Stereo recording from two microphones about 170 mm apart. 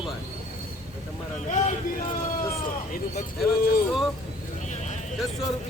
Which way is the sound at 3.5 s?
60° left (ahead or behind).